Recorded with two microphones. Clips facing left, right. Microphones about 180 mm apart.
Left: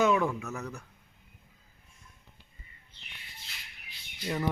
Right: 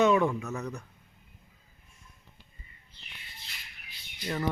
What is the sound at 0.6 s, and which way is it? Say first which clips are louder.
Speech: right 3 dB; 15° right (ahead or behind).